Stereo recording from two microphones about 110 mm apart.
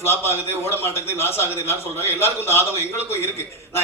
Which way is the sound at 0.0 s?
20° left (ahead or behind).